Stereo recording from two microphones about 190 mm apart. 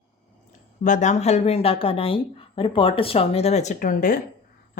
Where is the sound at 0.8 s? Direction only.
40° left (ahead or behind).